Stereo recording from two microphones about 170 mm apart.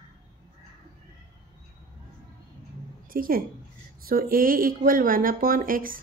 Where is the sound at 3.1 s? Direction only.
55° right (ahead or behind).